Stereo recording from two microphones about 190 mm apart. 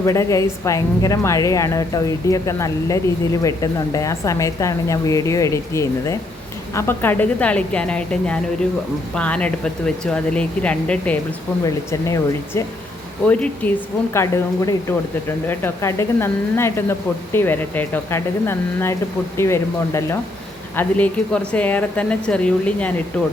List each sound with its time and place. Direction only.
0.0 s speech: 15° left (ahead or behind)
11.6 s speech: 15° left (ahead or behind)